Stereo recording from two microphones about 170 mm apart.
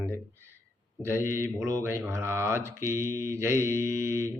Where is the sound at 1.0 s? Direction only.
15° right (ahead or behind).